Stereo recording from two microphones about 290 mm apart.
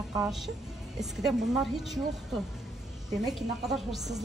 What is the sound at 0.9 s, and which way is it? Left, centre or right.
Speech, centre.